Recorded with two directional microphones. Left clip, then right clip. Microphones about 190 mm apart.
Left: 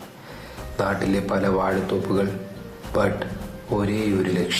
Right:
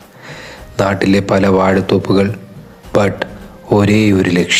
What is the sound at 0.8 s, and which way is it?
Speech, 35° right (ahead or behind).